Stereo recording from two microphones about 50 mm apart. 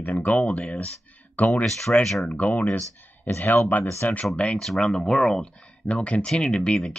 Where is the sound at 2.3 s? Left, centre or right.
Left.